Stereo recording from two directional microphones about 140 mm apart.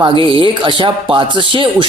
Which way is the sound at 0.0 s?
35° right (ahead or behind).